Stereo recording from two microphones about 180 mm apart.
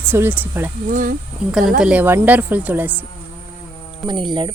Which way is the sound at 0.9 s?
50° right (ahead or behind).